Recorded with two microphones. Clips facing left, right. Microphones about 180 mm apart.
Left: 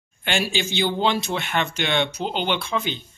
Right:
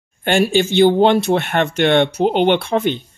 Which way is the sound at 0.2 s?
50° right (ahead or behind).